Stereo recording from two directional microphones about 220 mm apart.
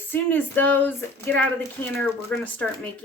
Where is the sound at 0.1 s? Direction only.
10° left (ahead or behind).